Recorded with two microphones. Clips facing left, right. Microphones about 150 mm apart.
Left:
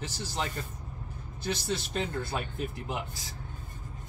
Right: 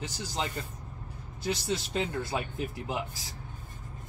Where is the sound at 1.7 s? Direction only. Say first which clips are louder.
Right 1 dB; 15° right (ahead or behind).